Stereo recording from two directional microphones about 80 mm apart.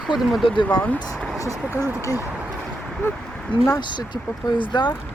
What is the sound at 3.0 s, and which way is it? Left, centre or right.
Speech, left.